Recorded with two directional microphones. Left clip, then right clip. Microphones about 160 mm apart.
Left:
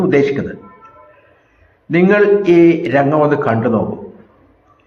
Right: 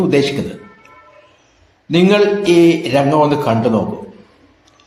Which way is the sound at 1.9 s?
20° right (ahead or behind).